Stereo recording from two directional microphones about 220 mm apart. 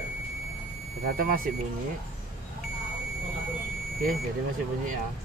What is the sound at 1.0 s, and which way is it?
Speech, 40° right (ahead or behind).